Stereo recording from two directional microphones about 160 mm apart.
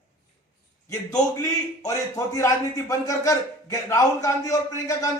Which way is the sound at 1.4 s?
20° left (ahead or behind).